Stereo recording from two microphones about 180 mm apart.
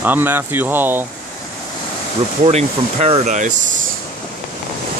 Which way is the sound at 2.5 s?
35° right (ahead or behind).